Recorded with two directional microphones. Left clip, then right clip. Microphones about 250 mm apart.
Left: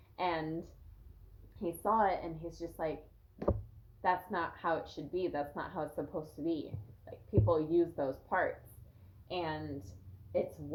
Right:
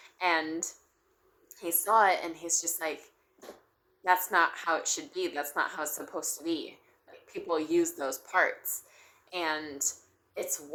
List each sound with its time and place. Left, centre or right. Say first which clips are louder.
0.2 s a sound: right 7 dB; centre
1.6 s a woman's voice: right 6 dB; centre
4.0 s a woman's voice: right 8 dB; centre